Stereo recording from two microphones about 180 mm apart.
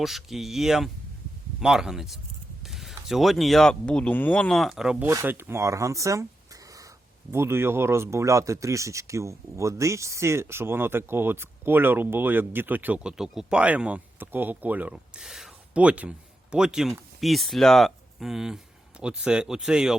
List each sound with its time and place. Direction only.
0.0 s speech: centre (ahead or behind)